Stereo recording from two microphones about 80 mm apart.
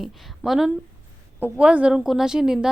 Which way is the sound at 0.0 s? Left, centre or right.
Centre.